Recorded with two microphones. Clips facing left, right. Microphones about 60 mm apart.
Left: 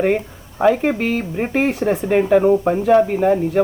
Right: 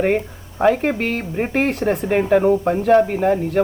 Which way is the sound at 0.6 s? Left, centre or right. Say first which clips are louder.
Left 1 dB; centre.